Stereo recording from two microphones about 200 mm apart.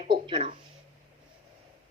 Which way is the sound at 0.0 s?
30° right (ahead or behind).